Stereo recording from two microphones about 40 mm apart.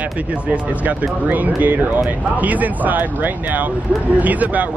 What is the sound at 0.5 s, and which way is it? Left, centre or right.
Speech, right.